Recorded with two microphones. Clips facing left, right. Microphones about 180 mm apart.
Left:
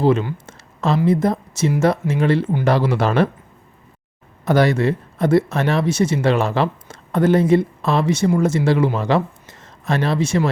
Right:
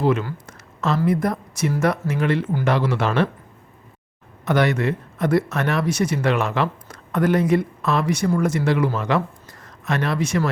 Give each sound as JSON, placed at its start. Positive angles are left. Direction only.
{"t": 0.0, "sound": "a sound", "side_deg": 30}
{"t": 0.9, "sound": "speech", "side_deg": 25}
{"t": 4.4, "sound": "speech", "side_deg": 35}